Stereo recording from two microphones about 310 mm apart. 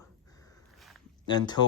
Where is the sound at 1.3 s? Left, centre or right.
Centre.